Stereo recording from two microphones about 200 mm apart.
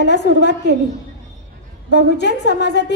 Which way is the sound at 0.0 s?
60° left (ahead or behind).